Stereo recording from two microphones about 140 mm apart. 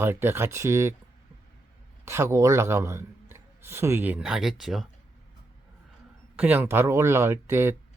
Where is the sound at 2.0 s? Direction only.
20° right (ahead or behind); by 4.8 s centre (ahead or behind).